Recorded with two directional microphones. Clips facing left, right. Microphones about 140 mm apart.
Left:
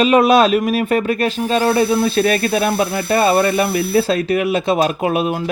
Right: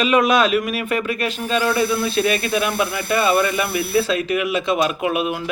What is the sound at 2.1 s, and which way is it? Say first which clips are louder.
Speech: left 4 dB; 45° left (ahead or behind).